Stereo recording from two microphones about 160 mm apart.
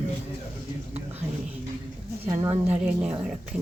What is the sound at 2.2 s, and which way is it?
Speech, 20° right (ahead or behind).